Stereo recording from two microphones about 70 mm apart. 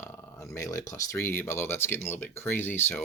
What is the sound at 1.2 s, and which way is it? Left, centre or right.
Speech, left.